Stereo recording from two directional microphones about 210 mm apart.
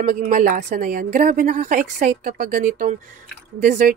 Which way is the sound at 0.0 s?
35° right (ahead or behind).